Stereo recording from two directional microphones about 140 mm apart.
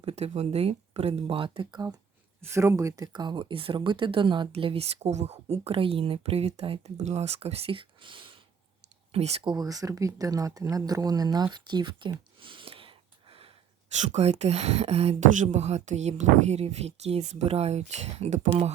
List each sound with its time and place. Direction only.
0.0 s speech: 45° right (ahead or behind)
2.4 s speech: 20° right (ahead or behind); by 8.4 s 35° right (ahead or behind)
9.1 s speech: 50° right (ahead or behind)
9.4 s speech: 30° right (ahead or behind)
12.4 s a sound: 35° right (ahead or behind)
14.0 s speech: 50° right (ahead or behind)